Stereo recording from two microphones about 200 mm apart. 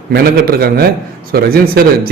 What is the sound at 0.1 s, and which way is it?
A man's voice, 50° right (ahead or behind).